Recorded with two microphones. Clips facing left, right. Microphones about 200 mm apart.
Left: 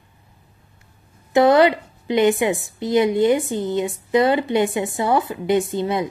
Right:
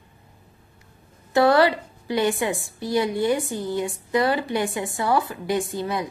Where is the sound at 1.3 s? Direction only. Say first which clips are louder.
Left 4 dB; 20° left (ahead or behind).